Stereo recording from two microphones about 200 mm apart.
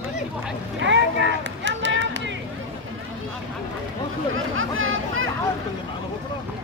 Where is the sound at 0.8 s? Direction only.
65° right (ahead or behind).